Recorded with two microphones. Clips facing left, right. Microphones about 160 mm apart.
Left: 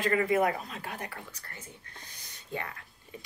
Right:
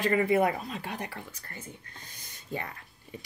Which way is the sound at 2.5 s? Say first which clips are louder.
Right 1 dB; 25° right (ahead or behind).